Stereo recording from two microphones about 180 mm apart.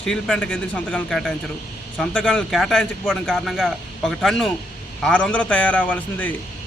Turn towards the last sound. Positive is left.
turn(degrees=10)  # may be behind; listen again after turning